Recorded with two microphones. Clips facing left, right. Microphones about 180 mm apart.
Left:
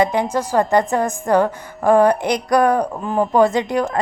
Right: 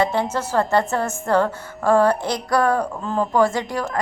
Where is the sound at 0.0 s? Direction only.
15° left (ahead or behind).